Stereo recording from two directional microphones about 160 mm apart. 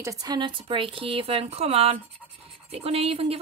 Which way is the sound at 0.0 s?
20° right (ahead or behind).